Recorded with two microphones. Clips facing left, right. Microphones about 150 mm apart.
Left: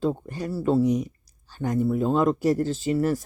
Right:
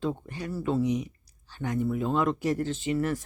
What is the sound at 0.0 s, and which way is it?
Speech, 40° left (ahead or behind).